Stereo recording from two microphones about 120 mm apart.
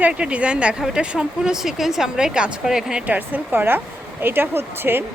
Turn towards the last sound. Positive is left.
turn(degrees=-20)  # may be behind; listen again after turning